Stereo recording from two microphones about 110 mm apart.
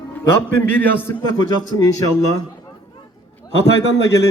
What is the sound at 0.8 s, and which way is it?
Speech, 15° left (ahead or behind).